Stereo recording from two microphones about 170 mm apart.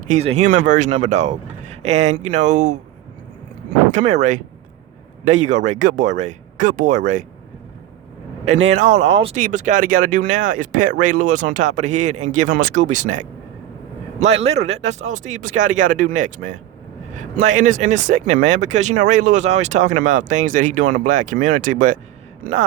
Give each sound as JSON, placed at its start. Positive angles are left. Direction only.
{"t": 0.1, "sound": "speech", "side_deg": -40}
{"t": 3.9, "sound": "speech", "side_deg": -45}
{"t": 8.7, "sound": "speech", "side_deg": -45}
{"t": 9.4, "sound": "speech", "side_deg": -50}